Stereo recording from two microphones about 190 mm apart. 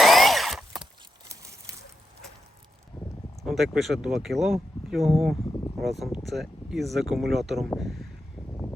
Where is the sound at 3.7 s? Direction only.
Centre (ahead or behind).